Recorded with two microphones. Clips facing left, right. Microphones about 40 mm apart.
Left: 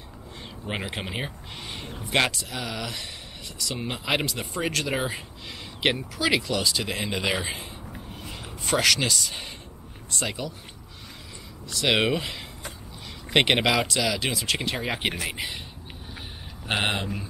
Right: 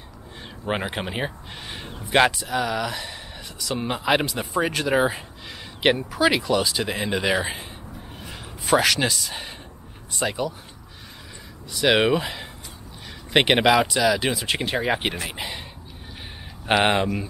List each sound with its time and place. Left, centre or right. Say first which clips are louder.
0.7 s speech: right 5 dB; centre
8.2 s a sound: right 1 dB; centre
10.1 s speech: right 5 dB; centre
11.7 s speech: right 4 dB; centre
16.8 s speech: right 7 dB; centre